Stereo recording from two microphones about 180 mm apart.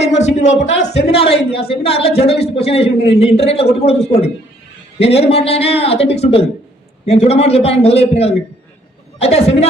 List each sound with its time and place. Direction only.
0.2 s a woman's voice: 40° left (ahead or behind)